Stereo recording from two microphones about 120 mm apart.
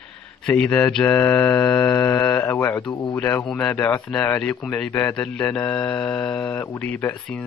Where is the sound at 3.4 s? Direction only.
10° left (ahead or behind).